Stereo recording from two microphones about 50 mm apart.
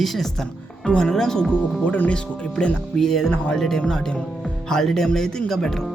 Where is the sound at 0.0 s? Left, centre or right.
Centre.